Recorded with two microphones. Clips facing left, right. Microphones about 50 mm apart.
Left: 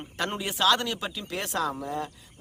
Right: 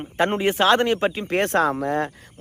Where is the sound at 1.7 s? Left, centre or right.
Right.